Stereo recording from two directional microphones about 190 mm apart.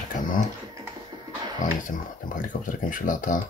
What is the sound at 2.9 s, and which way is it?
Speech, 45° left (ahead or behind).